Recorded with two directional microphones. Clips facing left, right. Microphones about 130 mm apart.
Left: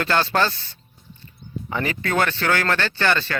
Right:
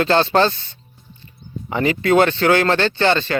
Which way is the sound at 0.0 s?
25° right (ahead or behind).